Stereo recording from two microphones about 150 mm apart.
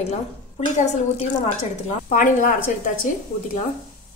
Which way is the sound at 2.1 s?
60° left (ahead or behind).